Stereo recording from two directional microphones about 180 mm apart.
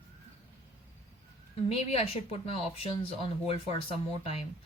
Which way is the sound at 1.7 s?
35° left (ahead or behind).